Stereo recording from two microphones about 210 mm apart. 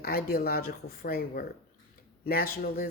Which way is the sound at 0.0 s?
45° left (ahead or behind).